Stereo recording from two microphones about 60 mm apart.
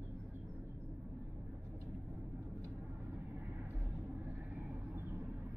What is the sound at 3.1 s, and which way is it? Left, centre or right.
Vehicle, right.